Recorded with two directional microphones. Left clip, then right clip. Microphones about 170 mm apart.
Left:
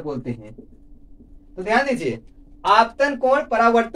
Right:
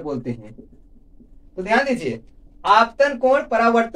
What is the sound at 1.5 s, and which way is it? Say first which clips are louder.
Speech: right 1 dB; 15° left (ahead or behind).